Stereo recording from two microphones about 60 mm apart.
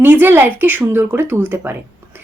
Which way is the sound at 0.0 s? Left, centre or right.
Right.